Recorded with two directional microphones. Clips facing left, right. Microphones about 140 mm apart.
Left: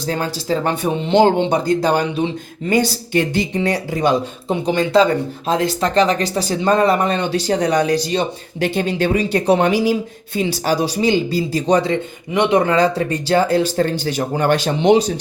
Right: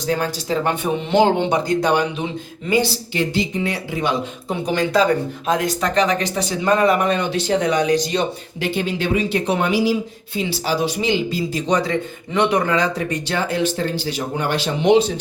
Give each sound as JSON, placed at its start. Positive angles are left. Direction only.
{"t": 1.1, "sound": "speech", "side_deg": 35}
{"t": 2.6, "sound": "speech", "side_deg": 50}
{"t": 4.4, "sound": "speech", "side_deg": 25}